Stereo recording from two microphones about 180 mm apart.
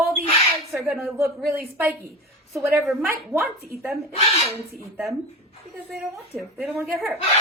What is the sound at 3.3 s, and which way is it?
Speech, centre (ahead or behind).